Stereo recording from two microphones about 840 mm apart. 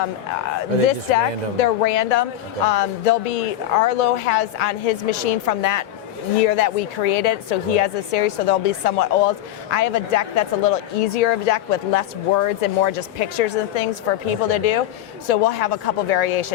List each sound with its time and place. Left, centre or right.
1.1 s a woman's voice: left